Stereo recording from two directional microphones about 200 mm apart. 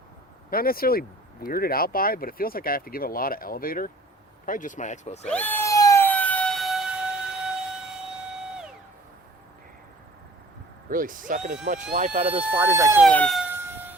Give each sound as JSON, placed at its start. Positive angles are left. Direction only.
{"t": 0.5, "sound": "speech", "side_deg": 50}
{"t": 5.3, "sound": "siren", "side_deg": 10}
{"t": 10.8, "sound": "speech", "side_deg": -45}
{"t": 12.4, "sound": "speech", "side_deg": -10}
{"t": 13.1, "sound": "speech", "side_deg": 5}
{"t": 13.5, "sound": "a sound", "side_deg": -10}